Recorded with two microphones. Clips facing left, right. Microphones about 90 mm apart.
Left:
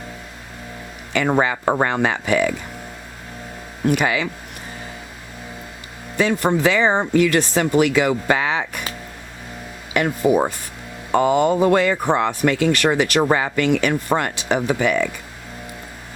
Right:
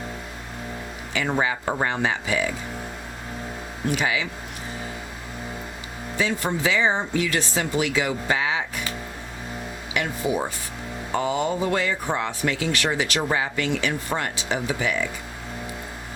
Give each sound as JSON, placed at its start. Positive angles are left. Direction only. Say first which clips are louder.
{"t": 1.1, "sound": "speech", "louder": "left 6 dB", "side_deg": 60}
{"t": 3.9, "sound": "speech", "louder": "left 4 dB", "side_deg": 55}
{"t": 6.1, "sound": "speech", "louder": "left 7 dB", "side_deg": 60}
{"t": 9.9, "sound": "speech", "louder": "left 8 dB", "side_deg": 55}